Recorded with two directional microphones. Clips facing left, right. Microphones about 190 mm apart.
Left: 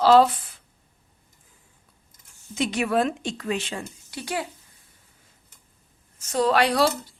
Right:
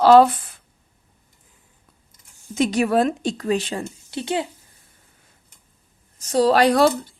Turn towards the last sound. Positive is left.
turn(degrees=-45)  # may be behind; listen again after turning